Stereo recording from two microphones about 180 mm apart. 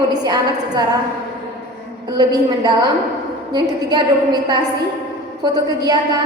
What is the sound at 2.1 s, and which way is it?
A woman's voice, 25° right (ahead or behind).